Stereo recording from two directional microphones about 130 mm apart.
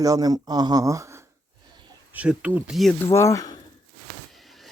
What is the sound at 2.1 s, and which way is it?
Speech, 10° right (ahead or behind).